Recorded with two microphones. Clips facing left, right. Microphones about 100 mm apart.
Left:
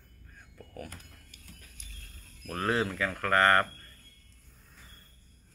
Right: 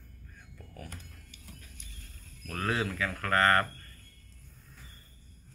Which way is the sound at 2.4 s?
30° left (ahead or behind).